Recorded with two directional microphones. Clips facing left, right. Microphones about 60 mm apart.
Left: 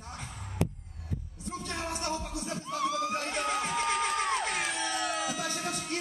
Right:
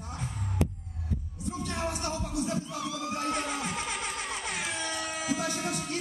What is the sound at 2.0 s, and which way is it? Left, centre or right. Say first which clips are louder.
Music: even; left.